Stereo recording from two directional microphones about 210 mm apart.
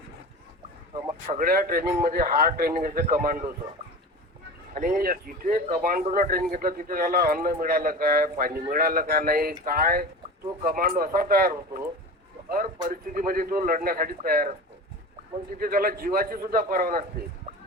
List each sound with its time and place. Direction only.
1.3 s speech: 40° right (ahead or behind)
4.7 s speech: 40° right (ahead or behind)
15.5 s speech: 45° right (ahead or behind)